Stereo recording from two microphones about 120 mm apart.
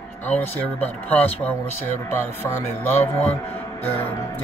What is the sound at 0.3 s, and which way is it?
Speech, 10° left (ahead or behind).